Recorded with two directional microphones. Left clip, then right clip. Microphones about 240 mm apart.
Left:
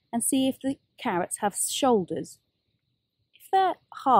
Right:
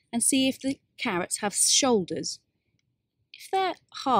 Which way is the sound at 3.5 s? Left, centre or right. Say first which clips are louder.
Left 4 dB; centre.